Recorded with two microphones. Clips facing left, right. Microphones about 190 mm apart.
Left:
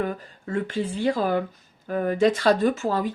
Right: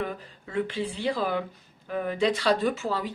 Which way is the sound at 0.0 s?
45° left (ahead or behind).